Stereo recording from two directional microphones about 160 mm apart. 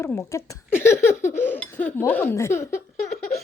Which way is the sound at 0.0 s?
15° left (ahead or behind).